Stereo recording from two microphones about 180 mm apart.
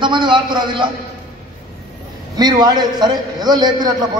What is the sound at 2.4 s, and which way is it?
A man's voice, 25° right (ahead or behind).